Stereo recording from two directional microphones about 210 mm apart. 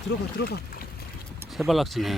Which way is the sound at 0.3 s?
50° left (ahead or behind).